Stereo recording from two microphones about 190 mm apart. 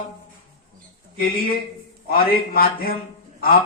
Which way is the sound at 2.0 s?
50° left (ahead or behind).